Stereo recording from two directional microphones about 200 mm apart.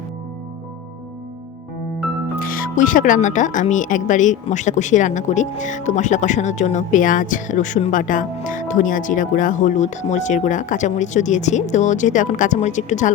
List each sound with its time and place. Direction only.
2.4 s speech: 45° left (ahead or behind)